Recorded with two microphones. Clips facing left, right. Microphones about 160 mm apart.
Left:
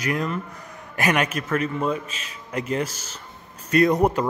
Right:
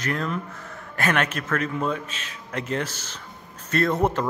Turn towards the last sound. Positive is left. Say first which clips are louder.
# left 4 dB
turn(degrees=15)  # may be behind; listen again after turning